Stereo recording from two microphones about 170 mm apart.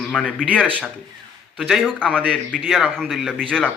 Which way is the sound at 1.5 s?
Centre (ahead or behind).